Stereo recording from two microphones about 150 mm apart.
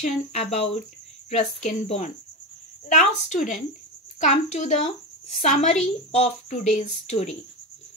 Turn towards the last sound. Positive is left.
turn(degrees=50)  # may be behind; listen again after turning